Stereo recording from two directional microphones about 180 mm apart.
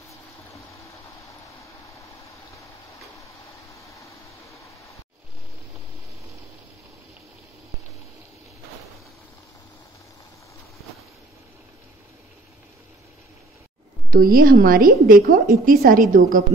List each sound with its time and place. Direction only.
14.1 s a woman's voice: 55° right (ahead or behind)